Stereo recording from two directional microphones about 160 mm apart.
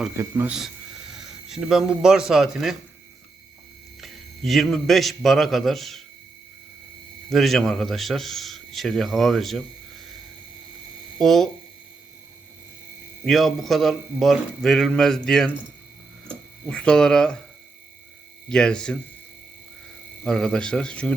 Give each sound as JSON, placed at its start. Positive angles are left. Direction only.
{"t": 0.2, "sound": "speech", "side_deg": -15}
{"t": 1.1, "sound": "speech", "side_deg": -5}
{"t": 4.0, "sound": "a man's voice", "side_deg": 0}
{"t": 7.3, "sound": "a man's voice", "side_deg": 0}
{"t": 11.2, "sound": "a man's voice", "side_deg": 0}
{"t": 13.2, "sound": "a man's voice", "side_deg": 0}
{"t": 18.4, "sound": "a man's voice", "side_deg": 5}
{"t": 20.2, "sound": "a man's voice", "side_deg": 5}